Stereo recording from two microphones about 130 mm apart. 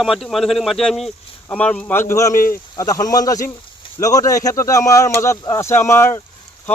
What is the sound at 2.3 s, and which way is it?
Speech, 90° left.